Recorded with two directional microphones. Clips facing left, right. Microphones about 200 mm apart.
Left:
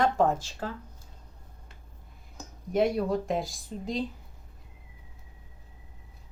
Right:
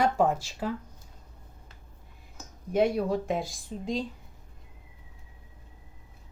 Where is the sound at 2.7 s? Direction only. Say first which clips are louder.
Even; centre (ahead or behind).